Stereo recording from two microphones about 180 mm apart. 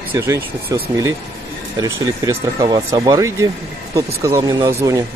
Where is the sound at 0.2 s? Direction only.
15° right (ahead or behind).